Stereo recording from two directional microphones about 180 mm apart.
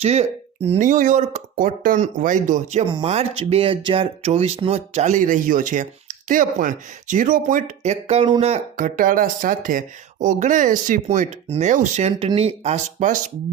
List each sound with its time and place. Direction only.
0.0 s speech: 35° right (ahead or behind)